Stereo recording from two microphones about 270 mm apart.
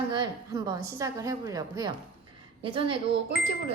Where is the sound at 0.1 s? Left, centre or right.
Centre.